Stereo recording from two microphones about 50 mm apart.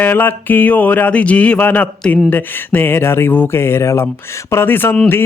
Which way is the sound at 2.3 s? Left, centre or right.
Left.